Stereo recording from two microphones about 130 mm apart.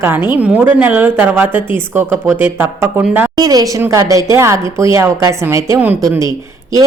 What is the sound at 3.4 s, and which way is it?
A woman's voice, 30° right (ahead or behind).